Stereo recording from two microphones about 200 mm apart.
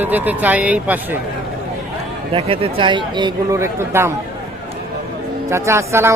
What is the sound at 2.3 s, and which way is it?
A man's voice, 25° right (ahead or behind).